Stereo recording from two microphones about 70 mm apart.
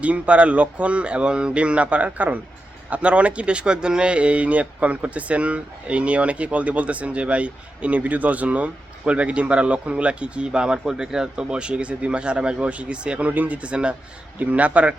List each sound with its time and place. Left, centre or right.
0.0 s speech: centre